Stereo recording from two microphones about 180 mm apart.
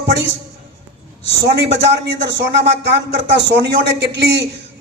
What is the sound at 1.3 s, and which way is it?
A man's voice, 75° right (ahead or behind).